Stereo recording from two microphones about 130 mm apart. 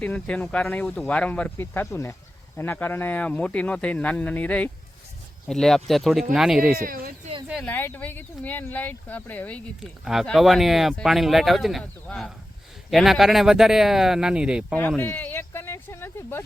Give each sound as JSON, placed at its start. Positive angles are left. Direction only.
{"t": 0.0, "sound": "speech", "side_deg": 10}
{"t": 6.8, "sound": "speech", "side_deg": -90}
{"t": 7.6, "sound": "speech", "side_deg": 15}
{"t": 9.8, "sound": "speech", "side_deg": -5}
{"t": 14.8, "sound": "a sound", "side_deg": 15}